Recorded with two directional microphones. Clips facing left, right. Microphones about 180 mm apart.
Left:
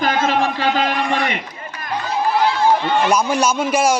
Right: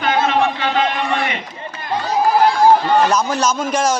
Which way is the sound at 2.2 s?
40° right (ahead or behind).